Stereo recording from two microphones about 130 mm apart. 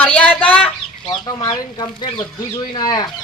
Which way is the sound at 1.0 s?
35° left (ahead or behind).